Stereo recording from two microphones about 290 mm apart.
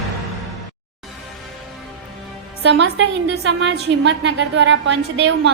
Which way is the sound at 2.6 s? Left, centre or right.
Right.